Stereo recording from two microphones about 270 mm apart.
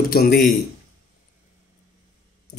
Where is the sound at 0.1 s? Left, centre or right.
Left.